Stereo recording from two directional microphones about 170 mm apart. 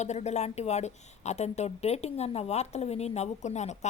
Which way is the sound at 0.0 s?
40° left (ahead or behind).